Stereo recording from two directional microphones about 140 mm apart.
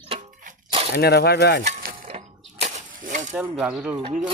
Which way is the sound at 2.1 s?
50° right (ahead or behind).